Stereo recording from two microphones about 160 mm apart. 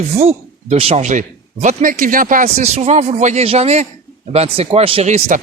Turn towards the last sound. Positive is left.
turn(degrees=-45)  # may be behind; listen again after turning